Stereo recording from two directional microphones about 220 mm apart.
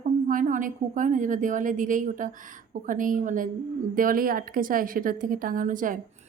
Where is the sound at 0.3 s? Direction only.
35° right (ahead or behind).